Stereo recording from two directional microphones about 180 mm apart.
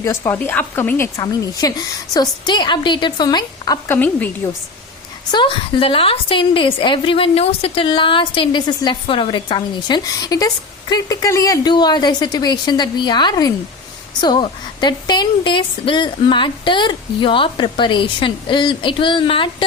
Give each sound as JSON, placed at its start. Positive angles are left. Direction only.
{"t": 0.0, "sound": "a woman's voice", "side_deg": 15}
{"t": 5.3, "sound": "a woman's voice", "side_deg": 25}